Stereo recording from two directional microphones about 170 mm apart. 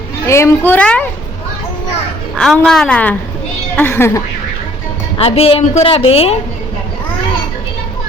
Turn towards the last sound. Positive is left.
turn(degrees=35)  # may be behind; listen again after turning